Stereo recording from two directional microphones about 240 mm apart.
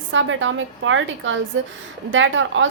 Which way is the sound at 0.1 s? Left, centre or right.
Right.